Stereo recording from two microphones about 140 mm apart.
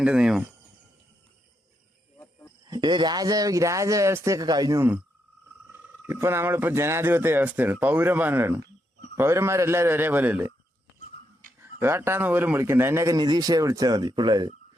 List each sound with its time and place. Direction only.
0.0 s speech: 5° right (ahead or behind)
2.1 s a sound: 15° left (ahead or behind)
2.6 s a man's voice: 30° right (ahead or behind); by 10.5 s 15° right (ahead or behind)
11.6 s a man's voice: 15° right (ahead or behind)